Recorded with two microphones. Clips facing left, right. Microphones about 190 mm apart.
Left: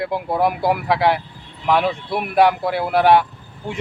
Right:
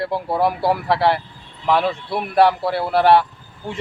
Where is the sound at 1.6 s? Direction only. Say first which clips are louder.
Even; centre (ahead or behind).